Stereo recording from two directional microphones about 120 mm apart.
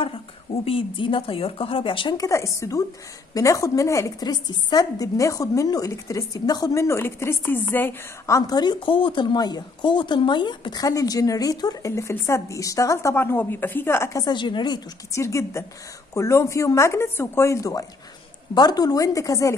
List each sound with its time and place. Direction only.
0.7 s speech: 45° left (ahead or behind)
2.1 s a woman's voice: 25° left (ahead or behind)
8.4 s a woman's voice: 35° left (ahead or behind)
14.2 s a woman's voice: 40° left (ahead or behind)
15.1 s a woman's voice: 25° left (ahead or behind)